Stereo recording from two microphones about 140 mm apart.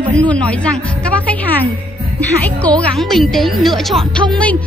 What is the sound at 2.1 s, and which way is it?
A woman's voice, 10° left (ahead or behind).